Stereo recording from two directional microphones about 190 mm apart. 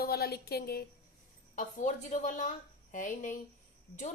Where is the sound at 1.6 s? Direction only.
40° left (ahead or behind).